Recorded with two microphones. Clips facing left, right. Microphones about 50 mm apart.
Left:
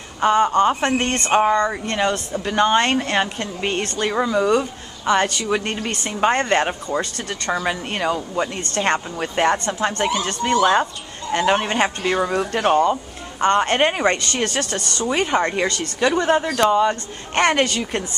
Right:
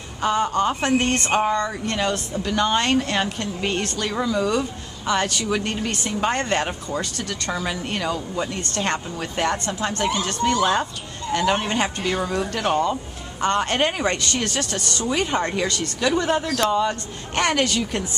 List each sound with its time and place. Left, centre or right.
0.2 s speech: left; by 1.3 s centre
1.3 s speech: centre
5.0 s speech: centre